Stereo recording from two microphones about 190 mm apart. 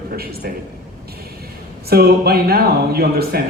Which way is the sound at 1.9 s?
55° right (ahead or behind).